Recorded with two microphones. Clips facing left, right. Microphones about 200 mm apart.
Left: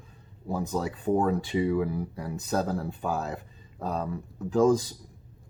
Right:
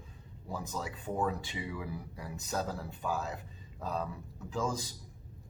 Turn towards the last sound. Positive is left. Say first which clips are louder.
# left 13 dB
turn(degrees=55)  # may be behind; listen again after turning